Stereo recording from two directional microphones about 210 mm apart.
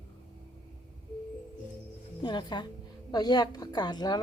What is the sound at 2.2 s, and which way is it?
A woman's voice, 20° left (ahead or behind).